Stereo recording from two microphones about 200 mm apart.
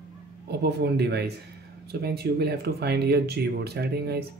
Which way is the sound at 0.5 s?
55° right (ahead or behind).